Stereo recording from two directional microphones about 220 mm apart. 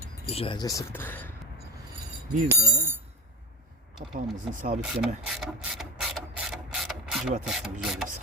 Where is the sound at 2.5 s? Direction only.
15° right (ahead or behind).